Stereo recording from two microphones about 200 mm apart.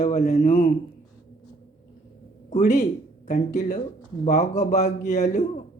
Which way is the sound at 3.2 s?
35° left (ahead or behind).